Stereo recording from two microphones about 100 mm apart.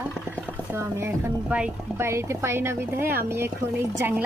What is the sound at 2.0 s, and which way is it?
A woman's voice, 25° right (ahead or behind).